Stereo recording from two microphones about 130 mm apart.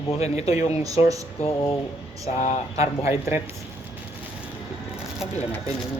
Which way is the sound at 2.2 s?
55° left (ahead or behind).